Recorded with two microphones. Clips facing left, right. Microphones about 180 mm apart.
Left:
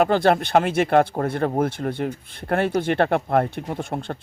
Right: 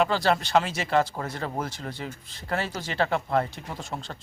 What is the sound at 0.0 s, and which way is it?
Speech, 55° left (ahead or behind).